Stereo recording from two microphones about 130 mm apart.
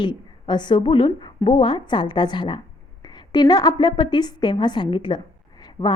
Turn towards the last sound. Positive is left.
turn(degrees=35)  # may be behind; listen again after turning